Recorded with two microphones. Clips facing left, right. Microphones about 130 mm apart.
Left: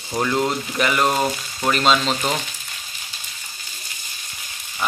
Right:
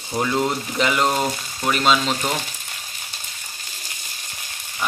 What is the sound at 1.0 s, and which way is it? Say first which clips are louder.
Speech: left 1 dB; 15° left (ahead or behind).